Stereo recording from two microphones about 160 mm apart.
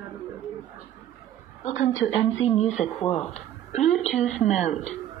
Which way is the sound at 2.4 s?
45° left (ahead or behind).